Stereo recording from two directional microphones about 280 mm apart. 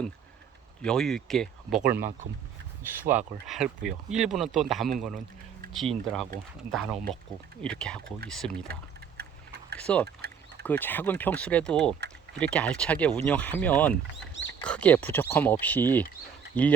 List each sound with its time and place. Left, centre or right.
0.8 s speech: centre
8.6 s pour: right
9.7 s speech: centre